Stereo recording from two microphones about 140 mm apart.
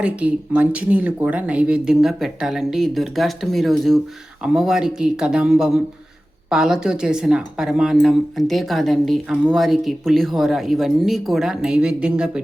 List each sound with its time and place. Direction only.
0.0 s speech: 10° right (ahead or behind)